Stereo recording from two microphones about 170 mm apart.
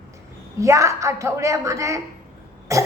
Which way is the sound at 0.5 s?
20° right (ahead or behind).